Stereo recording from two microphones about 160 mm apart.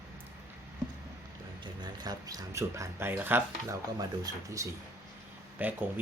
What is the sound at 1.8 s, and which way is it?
Speech, 25° right (ahead or behind).